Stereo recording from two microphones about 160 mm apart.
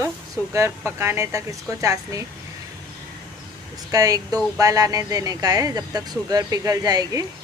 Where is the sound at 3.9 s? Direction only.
20° right (ahead or behind).